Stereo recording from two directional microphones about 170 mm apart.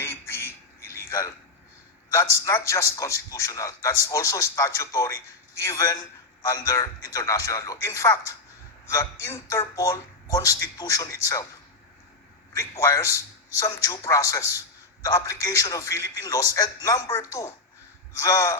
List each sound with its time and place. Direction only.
0.0 s a sound: 15° left (ahead or behind)
2.0 s a man's voice: 20° left (ahead or behind)
12.5 s a man's voice: 15° left (ahead or behind)